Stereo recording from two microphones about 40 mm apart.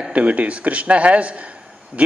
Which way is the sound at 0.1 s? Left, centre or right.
Right.